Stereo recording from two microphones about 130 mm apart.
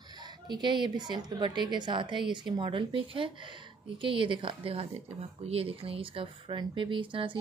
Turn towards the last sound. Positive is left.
turn(degrees=-40)  # may be behind; listen again after turning